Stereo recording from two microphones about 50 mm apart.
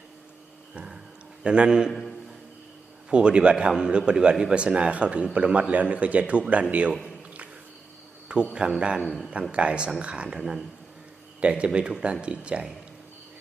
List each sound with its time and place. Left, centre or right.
1.5 s a man's voice: centre
1.9 s a man's voice: centre
3.1 s a man's voice: right
8.3 s a man's voice: centre
9.0 s a man's voice: centre
9.5 s a man's voice: right
10.3 s speech: centre
11.3 s a man's voice: right